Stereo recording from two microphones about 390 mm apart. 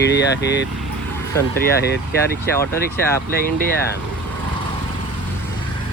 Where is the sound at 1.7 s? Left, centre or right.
Left.